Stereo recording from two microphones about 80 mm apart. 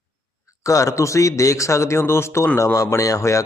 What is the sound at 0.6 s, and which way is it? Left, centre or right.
Speech, left.